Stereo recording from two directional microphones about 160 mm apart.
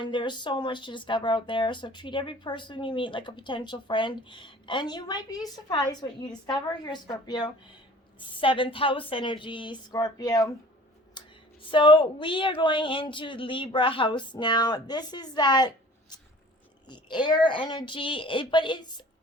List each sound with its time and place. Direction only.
0.0 s speech: 30° left (ahead or behind)
11.2 s a sound: 30° left (ahead or behind)
11.7 s speech: 30° left (ahead or behind)